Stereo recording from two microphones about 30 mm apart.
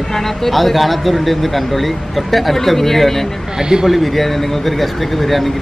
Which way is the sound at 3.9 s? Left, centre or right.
Centre.